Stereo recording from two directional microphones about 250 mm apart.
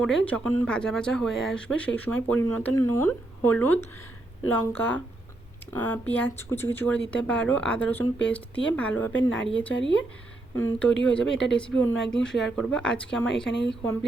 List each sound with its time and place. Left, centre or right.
0.0 s speech: centre
10.6 s speech: centre
13.5 s speech: left